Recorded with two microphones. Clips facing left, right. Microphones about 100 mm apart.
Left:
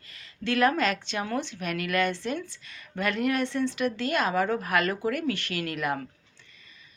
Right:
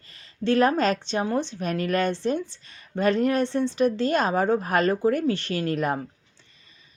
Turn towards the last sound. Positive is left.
turn(degrees=-35)  # may be behind; listen again after turning